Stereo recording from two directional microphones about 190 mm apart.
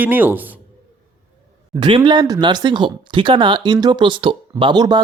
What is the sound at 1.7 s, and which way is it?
Speech, 25° right (ahead or behind).